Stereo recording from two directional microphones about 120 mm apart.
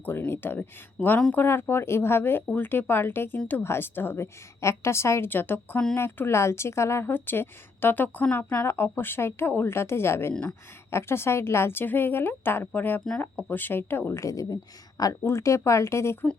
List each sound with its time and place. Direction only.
0.0 s speech: 15° left (ahead or behind)